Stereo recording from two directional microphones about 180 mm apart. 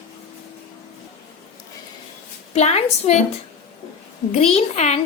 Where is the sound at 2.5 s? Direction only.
35° left (ahead or behind).